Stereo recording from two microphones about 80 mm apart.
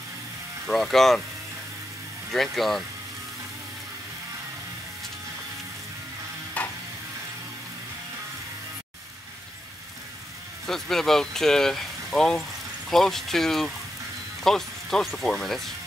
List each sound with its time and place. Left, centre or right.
0.7 s speech: centre
2.3 s speech: centre
6.6 s stir: centre
10.7 s speech: centre